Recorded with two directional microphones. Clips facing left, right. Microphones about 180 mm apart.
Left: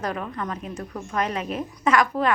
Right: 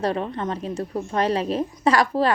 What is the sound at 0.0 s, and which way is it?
A woman's voice, 30° right (ahead or behind).